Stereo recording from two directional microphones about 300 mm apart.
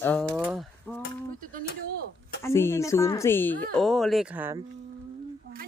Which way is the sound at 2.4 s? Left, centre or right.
Centre.